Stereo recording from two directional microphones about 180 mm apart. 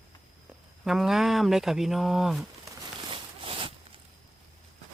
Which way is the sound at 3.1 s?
30° right (ahead or behind).